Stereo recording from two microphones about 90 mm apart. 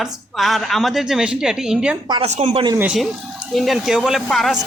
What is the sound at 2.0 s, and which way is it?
Speech, 75° right (ahead or behind).